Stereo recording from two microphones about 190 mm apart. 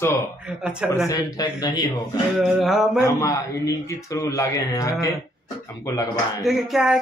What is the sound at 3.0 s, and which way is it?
A man's voice, 15° left (ahead or behind).